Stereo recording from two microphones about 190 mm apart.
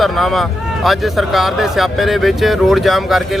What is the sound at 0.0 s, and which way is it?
Speech, centre (ahead or behind).